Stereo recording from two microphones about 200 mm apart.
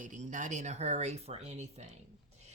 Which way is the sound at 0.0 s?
40° right (ahead or behind).